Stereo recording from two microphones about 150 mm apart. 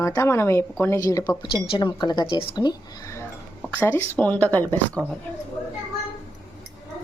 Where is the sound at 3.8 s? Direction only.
10° left (ahead or behind).